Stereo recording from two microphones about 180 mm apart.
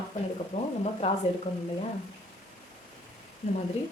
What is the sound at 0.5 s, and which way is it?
Speech, 40° left (ahead or behind).